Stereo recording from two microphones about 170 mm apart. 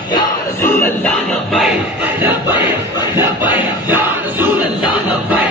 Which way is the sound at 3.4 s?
10° right (ahead or behind).